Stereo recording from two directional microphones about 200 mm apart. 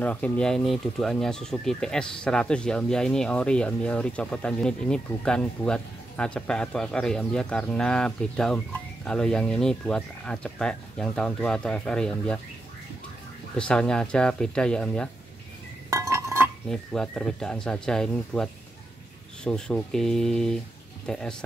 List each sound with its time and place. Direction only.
0.0 s speech: 5° left (ahead or behind)
13.6 s speech: 5° left (ahead or behind)
15.9 s chink: 15° right (ahead or behind)
16.6 s speech: 5° left (ahead or behind)